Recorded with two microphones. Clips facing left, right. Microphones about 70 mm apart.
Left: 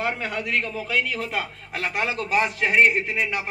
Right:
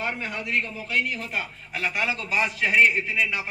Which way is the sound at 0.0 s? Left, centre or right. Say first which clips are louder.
Left 3 dB; left.